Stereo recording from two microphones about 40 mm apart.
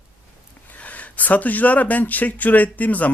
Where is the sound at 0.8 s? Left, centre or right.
Left.